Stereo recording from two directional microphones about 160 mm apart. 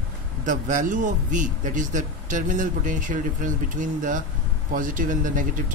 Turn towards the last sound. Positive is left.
turn(degrees=-55)  # may be behind; listen again after turning